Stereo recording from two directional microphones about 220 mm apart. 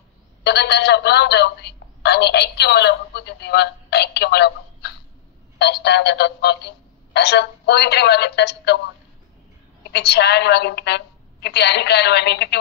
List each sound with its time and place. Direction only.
0.4 s a woman's voice: 50° left (ahead or behind)